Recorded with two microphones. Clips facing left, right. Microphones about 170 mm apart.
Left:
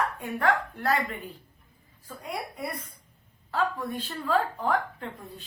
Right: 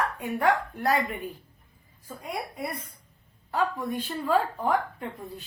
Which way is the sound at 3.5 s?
15° right (ahead or behind).